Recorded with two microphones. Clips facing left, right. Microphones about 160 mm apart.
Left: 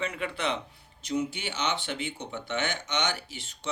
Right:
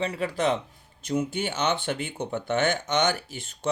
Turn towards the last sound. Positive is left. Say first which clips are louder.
# right 5 dB
turn(degrees=-50)  # may be behind; listen again after turning